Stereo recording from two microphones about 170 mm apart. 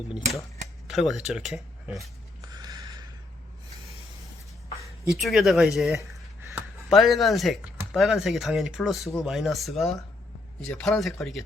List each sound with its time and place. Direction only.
0.9 s speech: centre (ahead or behind)
2.4 s a sound: 25° right (ahead or behind)
5.0 s speech: centre (ahead or behind)